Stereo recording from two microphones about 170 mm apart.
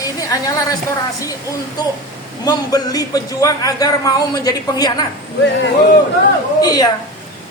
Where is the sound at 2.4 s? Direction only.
25° left (ahead or behind).